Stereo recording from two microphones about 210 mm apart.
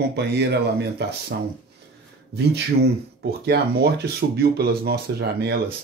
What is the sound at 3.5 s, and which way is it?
Speech, 50° right (ahead or behind).